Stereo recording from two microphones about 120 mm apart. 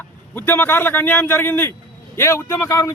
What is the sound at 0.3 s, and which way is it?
A man's voice, 15° left (ahead or behind).